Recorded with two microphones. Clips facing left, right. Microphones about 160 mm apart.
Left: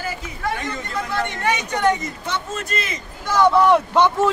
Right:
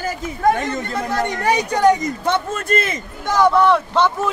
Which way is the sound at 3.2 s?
15° right (ahead or behind).